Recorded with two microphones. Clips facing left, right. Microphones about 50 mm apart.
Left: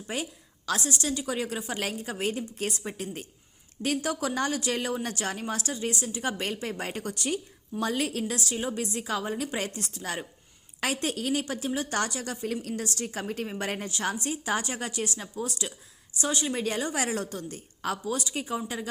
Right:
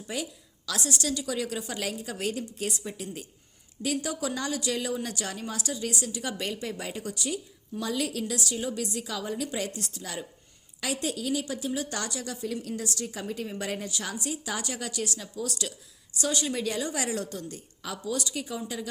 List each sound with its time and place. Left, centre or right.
0.1 s a woman's voice: left